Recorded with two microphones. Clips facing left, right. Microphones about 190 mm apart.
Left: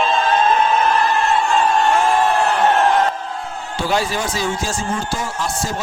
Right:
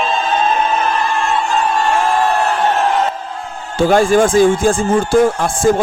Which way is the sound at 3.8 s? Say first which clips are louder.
Right 10 dB; 50° right (ahead or behind).